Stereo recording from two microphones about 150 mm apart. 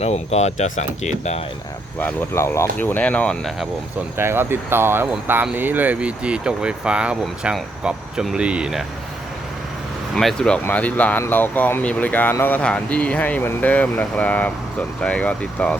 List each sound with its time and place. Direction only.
0.0 s speech: 45° left (ahead or behind)
2.0 s speech: 15° left (ahead or behind)
4.2 s speech: 15° right (ahead or behind)
10.2 s speech: 5° left (ahead or behind)